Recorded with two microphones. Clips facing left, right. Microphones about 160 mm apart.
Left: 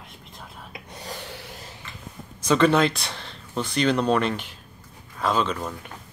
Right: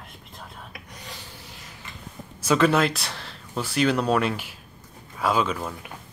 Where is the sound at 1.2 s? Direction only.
70° left (ahead or behind).